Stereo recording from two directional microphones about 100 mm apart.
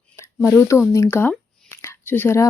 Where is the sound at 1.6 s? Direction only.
25° left (ahead or behind).